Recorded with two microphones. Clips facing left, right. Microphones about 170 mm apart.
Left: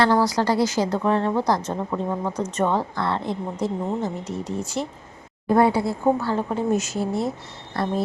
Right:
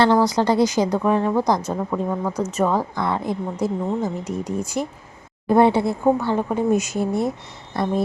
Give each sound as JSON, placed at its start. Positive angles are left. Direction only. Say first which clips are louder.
{"t": 0.0, "sound": "a woman's voice", "louder": "right 2 dB", "side_deg": -20}
{"t": 1.7, "sound": "a woman's voice", "louder": "right 2 dB", "side_deg": 0}
{"t": 5.5, "sound": "a woman's voice", "louder": "right 3 dB", "side_deg": -25}